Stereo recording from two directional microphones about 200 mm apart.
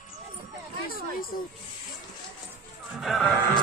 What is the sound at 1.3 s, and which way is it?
Speech, 45° left (ahead or behind).